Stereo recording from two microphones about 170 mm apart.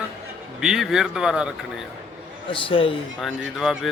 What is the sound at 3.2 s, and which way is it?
Speech, centre (ahead or behind).